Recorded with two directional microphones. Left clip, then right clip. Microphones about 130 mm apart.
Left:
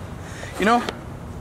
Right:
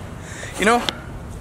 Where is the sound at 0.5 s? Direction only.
5° right (ahead or behind).